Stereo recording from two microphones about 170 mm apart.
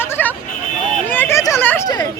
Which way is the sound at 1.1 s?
15° left (ahead or behind).